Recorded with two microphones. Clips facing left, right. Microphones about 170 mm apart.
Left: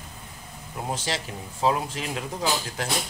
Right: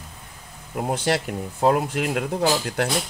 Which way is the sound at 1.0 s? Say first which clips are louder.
Right 8 dB; 60° right (ahead or behind).